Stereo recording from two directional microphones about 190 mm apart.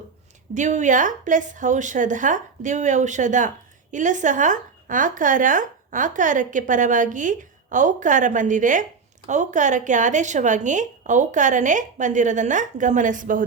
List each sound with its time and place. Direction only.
0.5 s a woman's voice: 40° right (ahead or behind)